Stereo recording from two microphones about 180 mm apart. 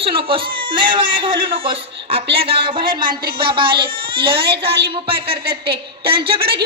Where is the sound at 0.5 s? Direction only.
25° right (ahead or behind).